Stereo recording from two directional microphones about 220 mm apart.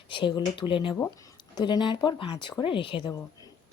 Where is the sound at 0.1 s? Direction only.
20° left (ahead or behind).